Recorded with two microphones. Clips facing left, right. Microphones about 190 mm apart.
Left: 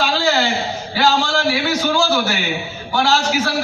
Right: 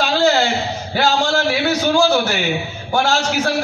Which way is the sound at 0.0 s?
45° right (ahead or behind).